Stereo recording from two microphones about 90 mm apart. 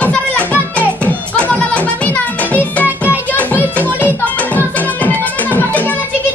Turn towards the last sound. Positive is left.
turn(degrees=20)  # may be behind; listen again after turning